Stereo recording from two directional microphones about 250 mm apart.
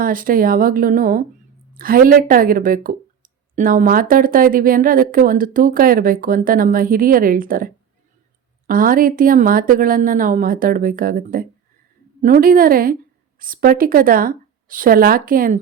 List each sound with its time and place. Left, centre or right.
0.0 s speech: right